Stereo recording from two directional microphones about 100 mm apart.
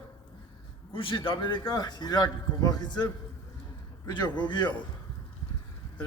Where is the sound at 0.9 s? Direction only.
60° left (ahead or behind); by 3.1 s 45° left (ahead or behind).